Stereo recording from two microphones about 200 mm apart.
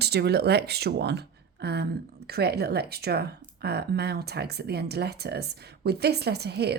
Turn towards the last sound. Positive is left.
turn(degrees=-55)  # may be behind; listen again after turning